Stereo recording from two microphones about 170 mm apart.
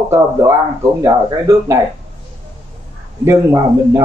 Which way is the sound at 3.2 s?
20° right (ahead or behind).